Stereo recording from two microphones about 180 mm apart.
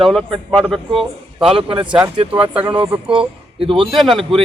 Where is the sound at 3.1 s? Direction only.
30° right (ahead or behind).